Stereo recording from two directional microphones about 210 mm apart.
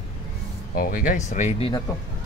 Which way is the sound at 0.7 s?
45° left (ahead or behind).